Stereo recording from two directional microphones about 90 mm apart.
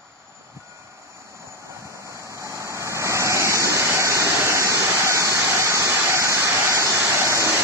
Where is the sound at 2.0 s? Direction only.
35° right (ahead or behind).